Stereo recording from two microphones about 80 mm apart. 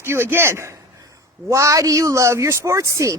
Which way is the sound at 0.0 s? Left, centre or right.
Right.